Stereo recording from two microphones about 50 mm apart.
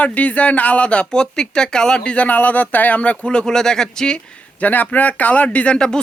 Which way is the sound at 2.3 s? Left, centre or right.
Left.